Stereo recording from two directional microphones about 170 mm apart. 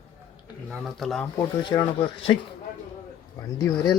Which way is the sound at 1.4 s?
25° left (ahead or behind).